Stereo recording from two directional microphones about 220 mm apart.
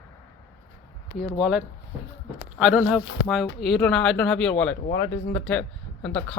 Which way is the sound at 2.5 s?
5° right (ahead or behind).